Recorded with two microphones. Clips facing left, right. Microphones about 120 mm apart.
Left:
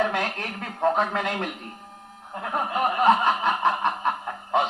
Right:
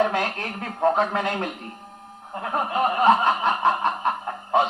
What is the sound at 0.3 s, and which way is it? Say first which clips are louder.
Speech: right 2 dB; 30° right (ahead or behind).